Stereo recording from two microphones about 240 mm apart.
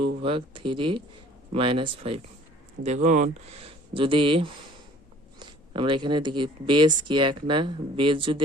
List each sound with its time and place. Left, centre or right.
0.2 s speech: right